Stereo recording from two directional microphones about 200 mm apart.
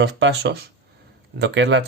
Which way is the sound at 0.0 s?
60° right (ahead or behind).